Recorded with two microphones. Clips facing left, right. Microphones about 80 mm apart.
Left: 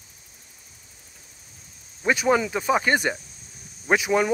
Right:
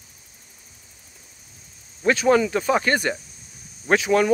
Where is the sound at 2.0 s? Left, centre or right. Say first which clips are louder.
Right 3 dB; centre.